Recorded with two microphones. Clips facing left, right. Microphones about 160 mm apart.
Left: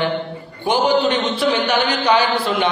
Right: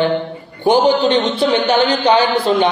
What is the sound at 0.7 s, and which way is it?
A man's voice, 25° right (ahead or behind).